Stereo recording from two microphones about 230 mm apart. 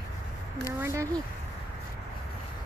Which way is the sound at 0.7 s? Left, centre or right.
Centre.